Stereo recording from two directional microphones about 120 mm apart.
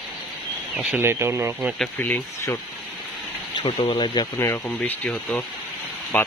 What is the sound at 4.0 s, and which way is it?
Speech, 30° left (ahead or behind).